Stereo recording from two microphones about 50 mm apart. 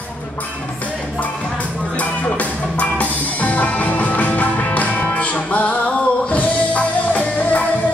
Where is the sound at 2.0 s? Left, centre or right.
Left.